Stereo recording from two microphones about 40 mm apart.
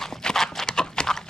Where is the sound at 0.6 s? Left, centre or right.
Centre.